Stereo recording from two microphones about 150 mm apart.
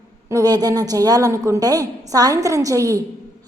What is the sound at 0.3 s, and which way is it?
A woman's voice, 25° right (ahead or behind).